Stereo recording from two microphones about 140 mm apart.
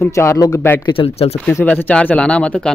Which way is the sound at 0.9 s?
45° left (ahead or behind).